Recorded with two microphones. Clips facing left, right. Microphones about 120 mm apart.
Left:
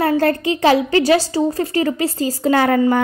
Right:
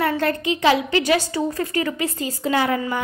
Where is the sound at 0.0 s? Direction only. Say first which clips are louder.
Left 5 dB; 35° left (ahead or behind).